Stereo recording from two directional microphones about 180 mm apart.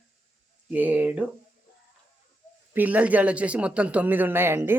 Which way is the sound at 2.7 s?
10° right (ahead or behind).